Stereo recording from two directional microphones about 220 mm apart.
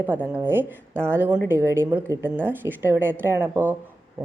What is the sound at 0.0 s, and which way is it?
A woman's voice, 10° right (ahead or behind).